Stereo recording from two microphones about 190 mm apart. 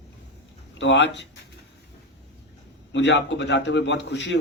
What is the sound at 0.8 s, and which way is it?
Speech, 70° left (ahead or behind).